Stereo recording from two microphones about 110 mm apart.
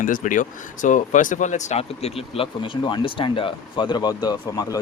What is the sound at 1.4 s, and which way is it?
Speech, 90° left.